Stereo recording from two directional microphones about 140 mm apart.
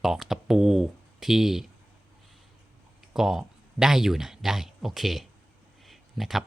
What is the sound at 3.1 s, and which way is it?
Speech, 5° right (ahead or behind).